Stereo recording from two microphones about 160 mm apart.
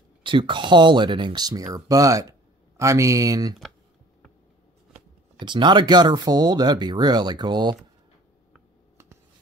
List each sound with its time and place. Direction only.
0.2 s speech: 30° right (ahead or behind)
5.4 s speech: 30° right (ahead or behind)